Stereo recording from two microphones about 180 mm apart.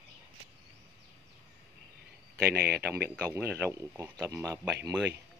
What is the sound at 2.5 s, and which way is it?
Speech, 60° right (ahead or behind).